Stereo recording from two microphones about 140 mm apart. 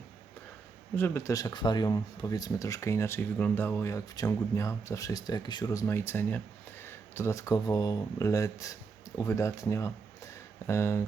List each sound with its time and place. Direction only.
0.9 s speech: 15° left (ahead or behind)